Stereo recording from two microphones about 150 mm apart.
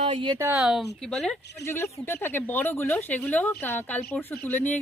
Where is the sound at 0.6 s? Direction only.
5° right (ahead or behind).